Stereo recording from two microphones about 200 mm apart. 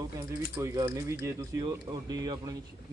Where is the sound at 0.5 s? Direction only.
15° right (ahead or behind).